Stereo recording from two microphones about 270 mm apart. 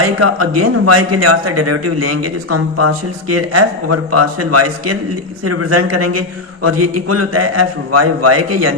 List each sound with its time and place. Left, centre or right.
0.0 s a man's voice: right